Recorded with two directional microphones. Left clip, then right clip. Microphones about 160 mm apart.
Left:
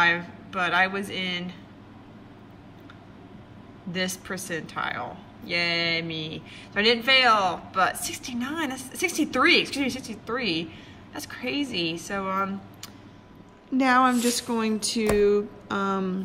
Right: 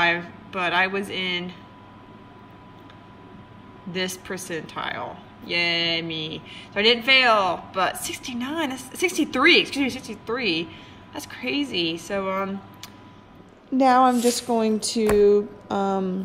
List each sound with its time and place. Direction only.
0.0 s speech: 5° right (ahead or behind)
3.9 s speech: centre (ahead or behind)
13.7 s a sound: 25° right (ahead or behind)